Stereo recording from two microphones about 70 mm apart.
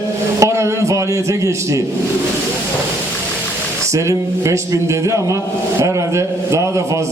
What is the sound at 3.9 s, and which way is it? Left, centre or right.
A man's voice, right.